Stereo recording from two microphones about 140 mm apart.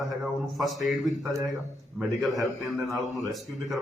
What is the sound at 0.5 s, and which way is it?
A man's voice, centre (ahead or behind).